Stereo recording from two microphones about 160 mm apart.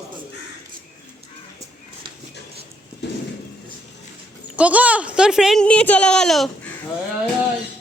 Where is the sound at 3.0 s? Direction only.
90° left.